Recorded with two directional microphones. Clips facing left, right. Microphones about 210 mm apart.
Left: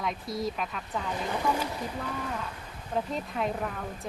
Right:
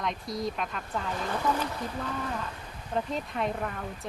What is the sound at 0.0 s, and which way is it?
Speech, 5° left (ahead or behind).